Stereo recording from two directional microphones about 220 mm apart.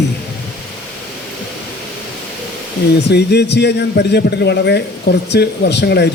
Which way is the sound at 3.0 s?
50° left (ahead or behind).